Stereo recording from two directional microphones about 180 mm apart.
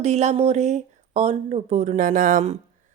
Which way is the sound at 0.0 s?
40° right (ahead or behind).